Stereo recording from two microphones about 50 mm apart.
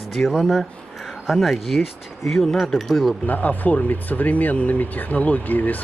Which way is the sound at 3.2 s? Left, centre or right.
Left.